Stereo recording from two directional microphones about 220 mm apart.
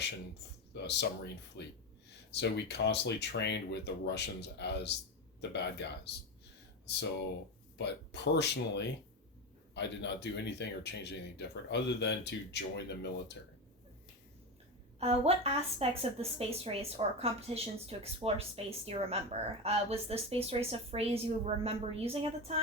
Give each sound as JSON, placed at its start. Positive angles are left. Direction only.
{"t": 0.7, "sound": "speech", "side_deg": 50}
{"t": 7.8, "sound": "speech", "side_deg": 50}
{"t": 14.9, "sound": "speech", "side_deg": -25}